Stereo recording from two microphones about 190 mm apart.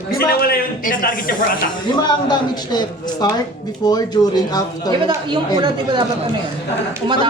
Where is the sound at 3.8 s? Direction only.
20° left (ahead or behind).